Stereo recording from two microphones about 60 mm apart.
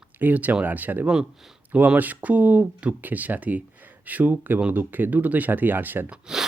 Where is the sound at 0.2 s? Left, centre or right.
Right.